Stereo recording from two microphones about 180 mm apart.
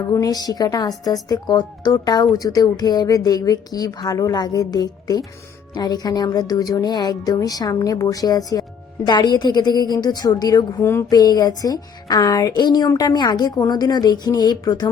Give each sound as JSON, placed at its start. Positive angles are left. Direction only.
{"t": 0.1, "sound": "a woman's voice", "side_deg": 20}